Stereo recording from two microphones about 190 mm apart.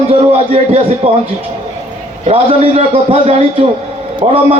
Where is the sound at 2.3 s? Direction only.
30° right (ahead or behind).